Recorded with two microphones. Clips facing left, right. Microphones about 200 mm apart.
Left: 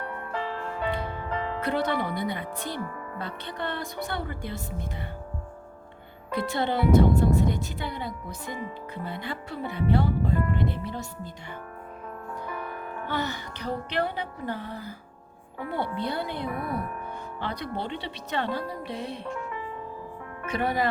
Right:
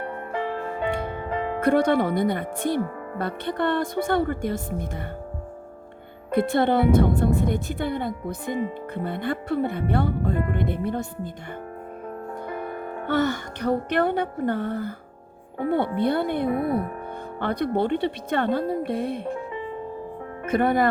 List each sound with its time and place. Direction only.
0.0 s music: 20° right (ahead or behind)
0.4 s music: 55° right (ahead or behind)
1.5 s speech: 50° right (ahead or behind)
6.3 s speech: 55° right (ahead or behind)
12.8 s music: 35° right (ahead or behind)
13.1 s speech: 50° right (ahead or behind)
16.0 s speech: 55° right (ahead or behind)
16.5 s speech: 25° right (ahead or behind)
17.4 s speech: 55° right (ahead or behind)
20.5 s speech: 50° right (ahead or behind)